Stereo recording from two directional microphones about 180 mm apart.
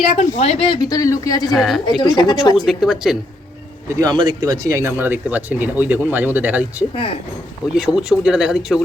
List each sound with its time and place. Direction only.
0.2 s speech: 40° left (ahead or behind); by 1.5 s 20° left (ahead or behind)
1.5 s speech: centre (ahead or behind)
1.9 s speech: 25° left (ahead or behind)
2.6 s speech: 5° right (ahead or behind)
3.8 s speech: 20° right (ahead or behind); by 8.8 s 5° right (ahead or behind)